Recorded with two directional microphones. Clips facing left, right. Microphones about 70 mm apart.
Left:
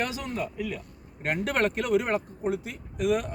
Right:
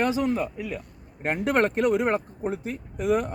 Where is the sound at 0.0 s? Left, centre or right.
Right.